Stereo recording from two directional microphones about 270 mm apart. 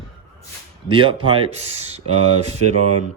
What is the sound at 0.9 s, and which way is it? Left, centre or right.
Speech, centre.